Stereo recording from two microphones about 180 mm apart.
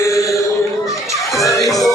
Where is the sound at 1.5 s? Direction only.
20° left (ahead or behind).